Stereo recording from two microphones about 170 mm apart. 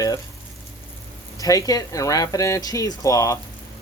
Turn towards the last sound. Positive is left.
turn(degrees=20)  # may be behind; listen again after turning